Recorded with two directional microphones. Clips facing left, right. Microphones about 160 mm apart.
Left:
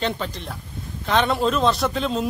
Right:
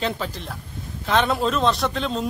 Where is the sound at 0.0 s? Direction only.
Centre (ahead or behind).